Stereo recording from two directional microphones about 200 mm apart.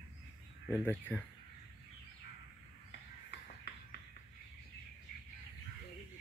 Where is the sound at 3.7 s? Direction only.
55° left (ahead or behind).